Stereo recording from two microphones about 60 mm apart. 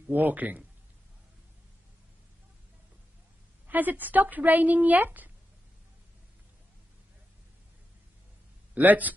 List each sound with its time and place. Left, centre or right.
0.1 s a woman's voice: right
3.6 s a woman's voice: right
8.7 s a woman's voice: right